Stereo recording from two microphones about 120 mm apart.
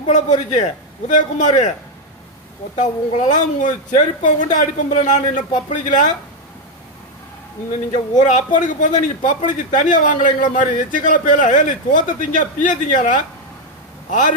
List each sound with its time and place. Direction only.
0.1 s a man's voice: 80° left
2.7 s a woman's voice: 75° left (ahead or behind); by 6.1 s 90° left
8.2 s speech: 90° left